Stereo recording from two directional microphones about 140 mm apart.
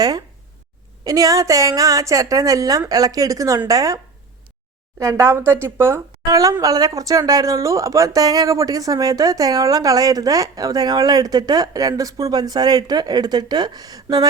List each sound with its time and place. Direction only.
1.0 s speech: 25° right (ahead or behind)